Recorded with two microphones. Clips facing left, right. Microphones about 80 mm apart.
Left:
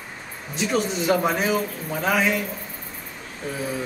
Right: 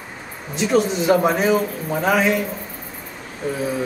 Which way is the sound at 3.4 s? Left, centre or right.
Centre.